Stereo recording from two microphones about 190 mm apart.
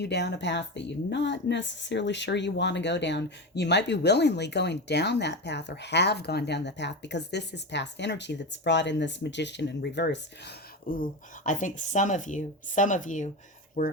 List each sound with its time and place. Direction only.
0.0 s a woman's voice: 65° left (ahead or behind); by 13.9 s 45° left (ahead or behind)